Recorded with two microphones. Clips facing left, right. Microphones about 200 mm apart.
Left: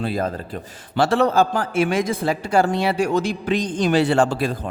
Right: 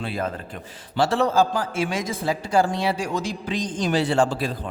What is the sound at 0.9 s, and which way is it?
A man's voice, 60° left (ahead or behind).